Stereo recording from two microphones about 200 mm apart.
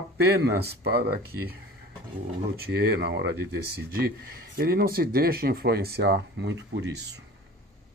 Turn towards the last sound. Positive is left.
turn(degrees=-60)  # may be behind; listen again after turning